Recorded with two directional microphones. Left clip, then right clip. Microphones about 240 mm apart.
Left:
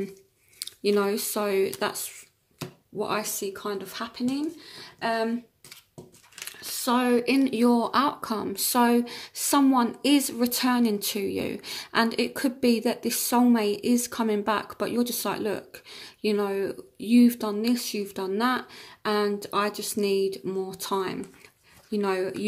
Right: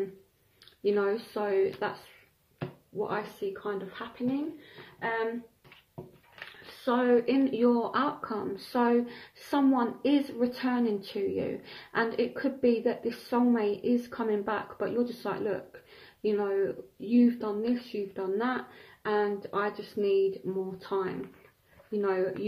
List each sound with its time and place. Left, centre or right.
0.6 s speech: left
3.0 s speech: left
6.8 s speech: left